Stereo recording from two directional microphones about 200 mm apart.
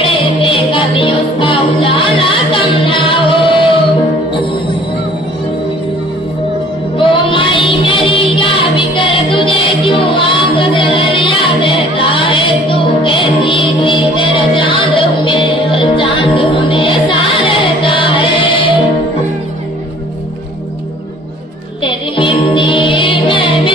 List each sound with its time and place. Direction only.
0.0 s music: 25° left (ahead or behind)
7.0 s music: 25° left (ahead or behind)
21.8 s music: 25° left (ahead or behind)